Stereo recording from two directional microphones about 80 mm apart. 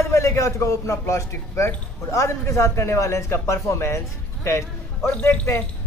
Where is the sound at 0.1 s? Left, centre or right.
Left.